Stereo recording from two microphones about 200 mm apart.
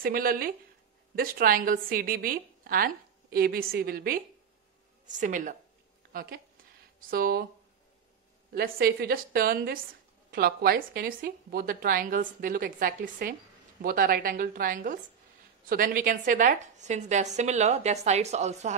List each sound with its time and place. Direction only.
0.0 s a woman's voice: 45° right (ahead or behind)
8.5 s a woman's voice: 50° right (ahead or behind)